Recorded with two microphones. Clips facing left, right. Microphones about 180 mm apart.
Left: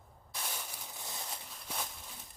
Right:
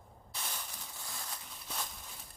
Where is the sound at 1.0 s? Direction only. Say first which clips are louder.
Left 2 dB; 20° left (ahead or behind).